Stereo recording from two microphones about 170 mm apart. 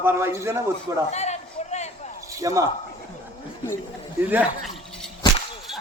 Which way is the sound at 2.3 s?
20° right (ahead or behind).